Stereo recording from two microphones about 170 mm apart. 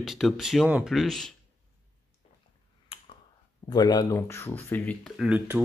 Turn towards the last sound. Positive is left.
turn(degrees=-5)  # may be behind; listen again after turning